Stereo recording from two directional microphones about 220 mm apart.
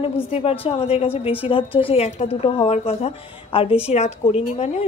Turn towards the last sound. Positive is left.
turn(degrees=30)  # may be behind; listen again after turning